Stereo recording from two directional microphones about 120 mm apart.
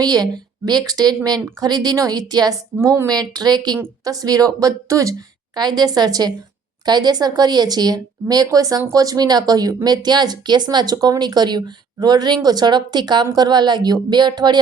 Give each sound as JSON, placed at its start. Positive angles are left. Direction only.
{"t": 0.0, "sound": "speech", "side_deg": -35}
{"t": 2.7, "sound": "speech", "side_deg": -25}